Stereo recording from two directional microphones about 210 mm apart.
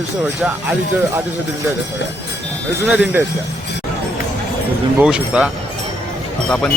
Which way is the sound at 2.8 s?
5° right (ahead or behind).